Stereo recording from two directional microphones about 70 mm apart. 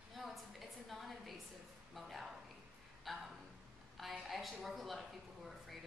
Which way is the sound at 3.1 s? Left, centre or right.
Centre.